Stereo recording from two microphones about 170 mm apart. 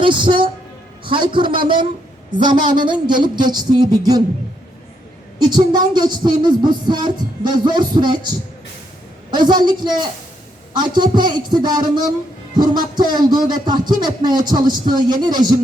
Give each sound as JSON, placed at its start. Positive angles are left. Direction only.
{"t": 0.0, "sound": "speech", "side_deg": -30}
{"t": 5.4, "sound": "speech", "side_deg": -25}
{"t": 9.3, "sound": "speech", "side_deg": -25}